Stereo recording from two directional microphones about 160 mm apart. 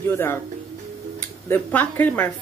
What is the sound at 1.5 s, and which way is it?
Speech, 10° left (ahead or behind).